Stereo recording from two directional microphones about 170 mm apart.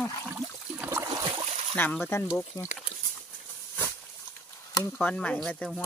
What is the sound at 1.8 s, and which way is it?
Speech, 10° left (ahead or behind).